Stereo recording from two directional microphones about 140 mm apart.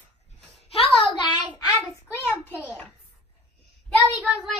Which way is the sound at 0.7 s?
40° left (ahead or behind).